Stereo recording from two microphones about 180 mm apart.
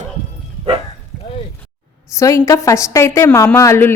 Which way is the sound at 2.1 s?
15° left (ahead or behind).